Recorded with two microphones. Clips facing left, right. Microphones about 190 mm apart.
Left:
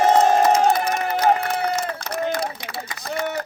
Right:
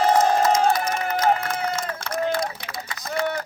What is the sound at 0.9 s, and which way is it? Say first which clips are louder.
Crowd: left 2 dB; 35° left (ahead or behind).